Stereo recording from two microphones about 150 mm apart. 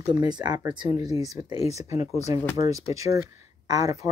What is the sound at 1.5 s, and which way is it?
Speech, 45° left (ahead or behind).